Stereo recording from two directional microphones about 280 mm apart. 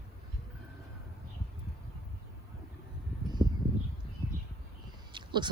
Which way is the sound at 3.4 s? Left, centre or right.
Centre.